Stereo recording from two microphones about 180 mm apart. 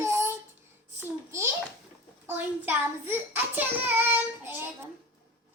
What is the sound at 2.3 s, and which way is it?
Child singing, 10° right (ahead or behind).